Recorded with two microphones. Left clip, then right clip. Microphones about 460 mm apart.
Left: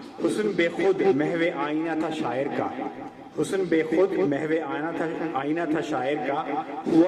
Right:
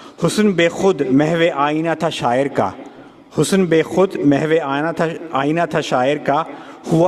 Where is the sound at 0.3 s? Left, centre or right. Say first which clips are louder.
Right 10 dB; right.